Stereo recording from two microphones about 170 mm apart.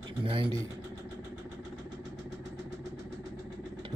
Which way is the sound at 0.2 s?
30° right (ahead or behind).